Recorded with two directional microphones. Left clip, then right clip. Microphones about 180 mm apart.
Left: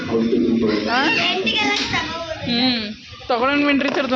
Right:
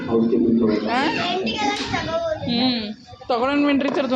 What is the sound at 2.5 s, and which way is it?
A man's voice, 5° left (ahead or behind).